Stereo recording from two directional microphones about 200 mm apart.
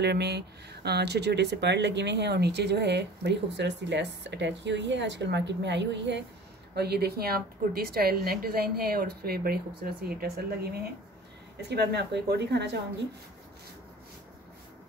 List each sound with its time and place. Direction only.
0.0 s a woman's voice: 55° right (ahead or behind)